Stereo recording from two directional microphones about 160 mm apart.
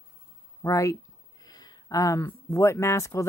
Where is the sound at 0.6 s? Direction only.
20° left (ahead or behind).